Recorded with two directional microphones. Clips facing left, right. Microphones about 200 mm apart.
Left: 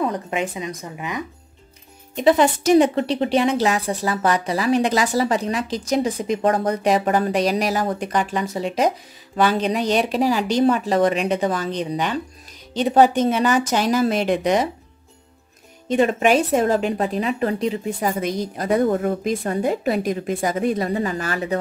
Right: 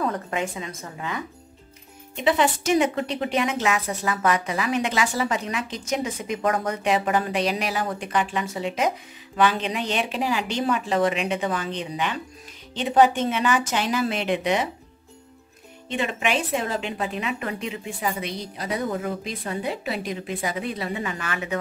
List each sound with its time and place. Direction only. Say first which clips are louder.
0.0 s speech: left 3 dB; 20° left (ahead or behind)
2.1 s a woman's voice: left 5 dB; 40° left (ahead or behind)
15.9 s a woman's voice: left 9 dB; 45° left (ahead or behind)